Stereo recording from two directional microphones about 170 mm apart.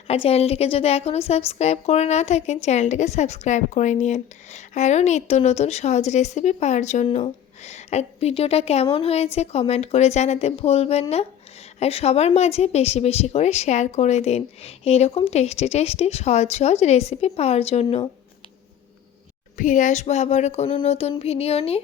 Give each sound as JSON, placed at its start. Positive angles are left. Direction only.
{"t": 0.1, "sound": "a woman's voice", "side_deg": 35}
{"t": 19.5, "sound": "a woman's voice", "side_deg": 50}